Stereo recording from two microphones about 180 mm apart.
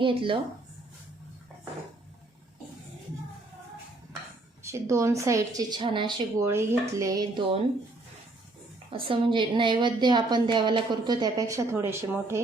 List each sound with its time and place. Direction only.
0.0 s a woman's voice: 30° right (ahead or behind)
4.6 s speech: 15° right (ahead or behind)
8.9 s a woman's voice: 30° right (ahead or behind); by 12.4 s 15° right (ahead or behind)